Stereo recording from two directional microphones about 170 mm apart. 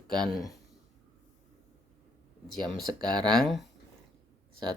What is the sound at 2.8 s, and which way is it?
Speech, 25° right (ahead or behind).